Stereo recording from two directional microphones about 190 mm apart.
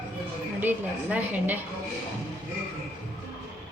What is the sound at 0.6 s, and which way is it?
Speech, 10° right (ahead or behind).